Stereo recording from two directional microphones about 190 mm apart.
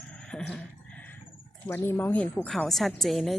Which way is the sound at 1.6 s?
15° left (ahead or behind).